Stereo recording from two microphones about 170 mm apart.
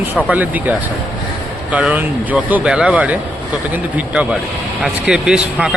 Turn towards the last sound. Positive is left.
turn(degrees=-5)  # may be behind; listen again after turning